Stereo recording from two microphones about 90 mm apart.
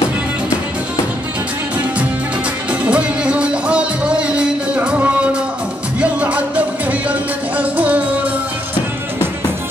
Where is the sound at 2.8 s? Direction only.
10° right (ahead or behind).